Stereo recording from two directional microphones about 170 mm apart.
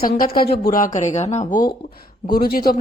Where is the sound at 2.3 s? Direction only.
60° left (ahead or behind).